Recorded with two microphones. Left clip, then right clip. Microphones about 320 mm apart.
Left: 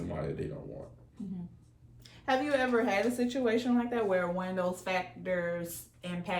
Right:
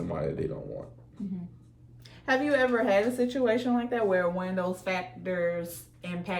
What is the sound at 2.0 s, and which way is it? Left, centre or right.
A woman's voice, centre.